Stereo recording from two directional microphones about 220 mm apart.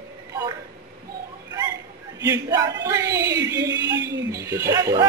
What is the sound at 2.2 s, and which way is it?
Speech, 15° right (ahead or behind).